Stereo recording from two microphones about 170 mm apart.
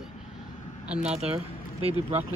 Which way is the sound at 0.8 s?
5° right (ahead or behind).